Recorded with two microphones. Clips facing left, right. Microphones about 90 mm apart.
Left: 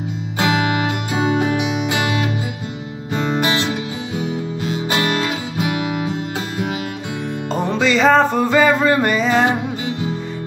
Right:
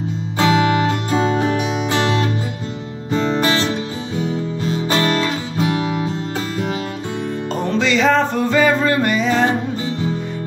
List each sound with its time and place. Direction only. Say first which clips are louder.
0.4 s music: right 3 dB; 35° right (ahead or behind)
4.2 s guitar: right 3 dB; 35° right (ahead or behind)
7.5 s music: left 1 dB; 10° left (ahead or behind)